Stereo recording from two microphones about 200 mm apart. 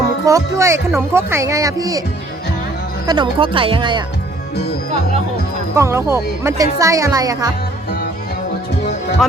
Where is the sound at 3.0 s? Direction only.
20° right (ahead or behind).